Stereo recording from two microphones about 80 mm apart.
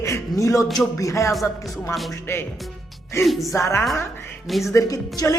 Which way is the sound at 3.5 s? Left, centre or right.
Left.